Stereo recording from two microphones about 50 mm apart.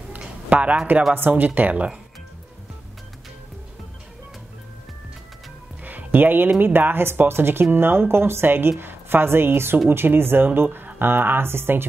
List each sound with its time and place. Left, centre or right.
0.5 s speech: right
1.1 s speech: right
5.9 s music: right
6.6 s a woman's voice: right